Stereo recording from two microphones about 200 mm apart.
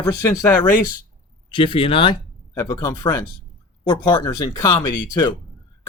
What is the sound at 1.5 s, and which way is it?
Speech, 25° left (ahead or behind).